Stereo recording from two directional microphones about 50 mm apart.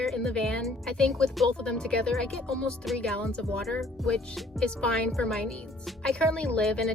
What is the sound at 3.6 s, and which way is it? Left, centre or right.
Speech, centre.